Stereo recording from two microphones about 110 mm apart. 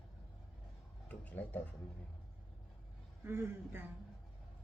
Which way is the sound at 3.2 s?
20° right (ahead or behind).